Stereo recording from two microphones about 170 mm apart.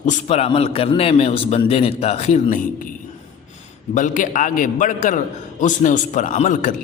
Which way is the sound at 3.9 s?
50° left (ahead or behind).